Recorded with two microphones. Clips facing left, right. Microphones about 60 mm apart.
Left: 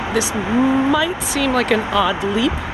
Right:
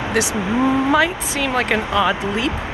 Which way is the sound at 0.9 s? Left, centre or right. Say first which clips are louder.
Right 2 dB; right.